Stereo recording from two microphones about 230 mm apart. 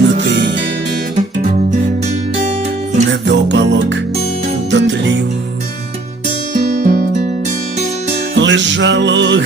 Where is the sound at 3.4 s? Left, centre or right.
Right.